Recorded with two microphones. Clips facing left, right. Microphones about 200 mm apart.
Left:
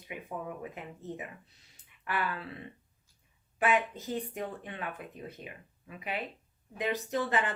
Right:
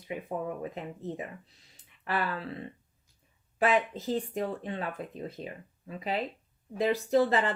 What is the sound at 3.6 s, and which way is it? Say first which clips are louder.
A woman's voice: right 3 dB; 30° right (ahead or behind).